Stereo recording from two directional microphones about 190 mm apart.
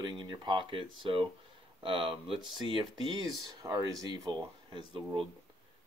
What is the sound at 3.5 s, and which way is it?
Speech, 20° right (ahead or behind).